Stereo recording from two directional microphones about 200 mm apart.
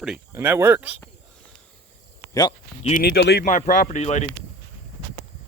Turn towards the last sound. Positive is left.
turn(degrees=35)  # may be behind; listen again after turning